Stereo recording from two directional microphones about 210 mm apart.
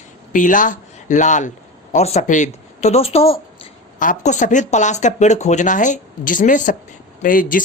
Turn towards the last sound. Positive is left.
turn(degrees=40)  # may be behind; listen again after turning